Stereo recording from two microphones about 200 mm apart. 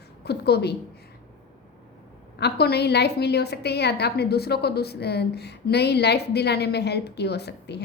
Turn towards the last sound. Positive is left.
turn(degrees=55)  # may be behind; listen again after turning